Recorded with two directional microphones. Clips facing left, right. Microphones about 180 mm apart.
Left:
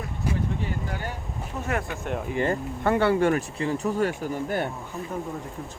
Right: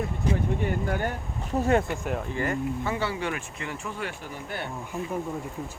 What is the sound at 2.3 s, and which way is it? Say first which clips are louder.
Speech: left 6 dB; 25° left (ahead or behind).